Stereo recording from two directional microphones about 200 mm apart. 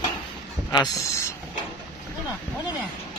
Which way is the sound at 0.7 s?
20° left (ahead or behind).